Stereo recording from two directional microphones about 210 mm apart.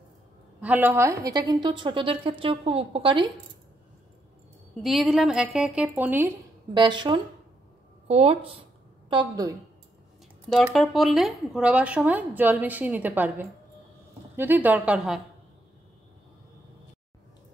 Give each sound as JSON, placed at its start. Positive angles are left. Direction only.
{"t": 0.6, "sound": "a woman's voice", "side_deg": -10}
{"t": 4.8, "sound": "speech", "side_deg": 0}
{"t": 6.7, "sound": "a woman's voice", "side_deg": -20}
{"t": 10.5, "sound": "a woman's voice", "side_deg": 0}